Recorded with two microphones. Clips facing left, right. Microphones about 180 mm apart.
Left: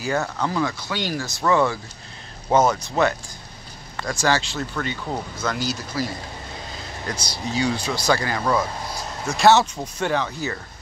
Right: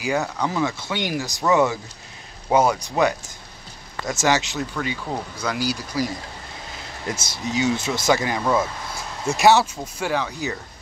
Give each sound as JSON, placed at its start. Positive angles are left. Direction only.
{"t": 0.0, "sound": "speech", "side_deg": -15}
{"t": 4.7, "sound": "speech", "side_deg": -5}
{"t": 7.1, "sound": "speech", "side_deg": -20}
{"t": 9.4, "sound": "speech", "side_deg": -10}